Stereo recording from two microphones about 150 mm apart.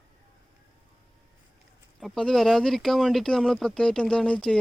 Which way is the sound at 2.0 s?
5° left (ahead or behind).